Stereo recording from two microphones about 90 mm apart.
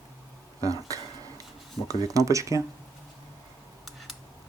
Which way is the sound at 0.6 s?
40° right (ahead or behind).